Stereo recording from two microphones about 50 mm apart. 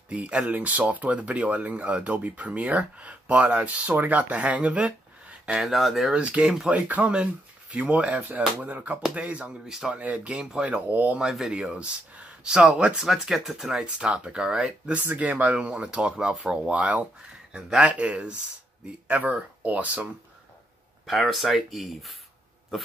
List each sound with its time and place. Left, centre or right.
0.1 s speech: right
5.6 s speech: centre
6.1 s speech: right
10.9 s speech: right
11.1 s speech: centre
11.5 s speech: right
13.0 s speech: centre
15.0 s speech: right
17.5 s speech: centre
21.1 s speech: centre